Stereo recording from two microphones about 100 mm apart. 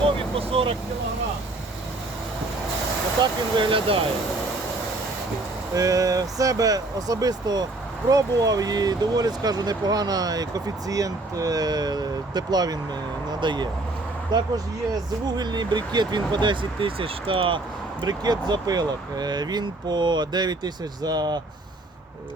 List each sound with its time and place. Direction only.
0.3 s vehicle: 70° right (ahead or behind)
3.2 s speech: 55° right (ahead or behind)
5.7 s speech: 35° right (ahead or behind); by 17.6 s 65° right (ahead or behind)
18.0 s speech: 45° right (ahead or behind)